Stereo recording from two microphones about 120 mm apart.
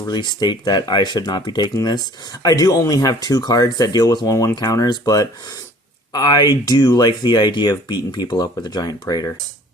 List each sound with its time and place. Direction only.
0.1 s speech: 35° left (ahead or behind)